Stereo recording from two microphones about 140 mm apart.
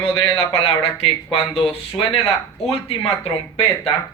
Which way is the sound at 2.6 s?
45° left (ahead or behind).